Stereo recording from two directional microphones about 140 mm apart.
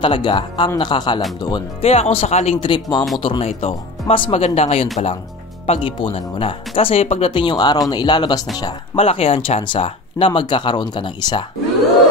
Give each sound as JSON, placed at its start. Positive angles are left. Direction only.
{"t": 0.0, "sound": "speech", "side_deg": 35}
{"t": 1.8, "sound": "speech", "side_deg": 45}
{"t": 8.9, "sound": "speech", "side_deg": 40}